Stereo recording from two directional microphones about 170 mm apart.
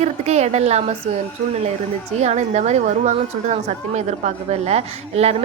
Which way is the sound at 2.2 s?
40° right (ahead or behind).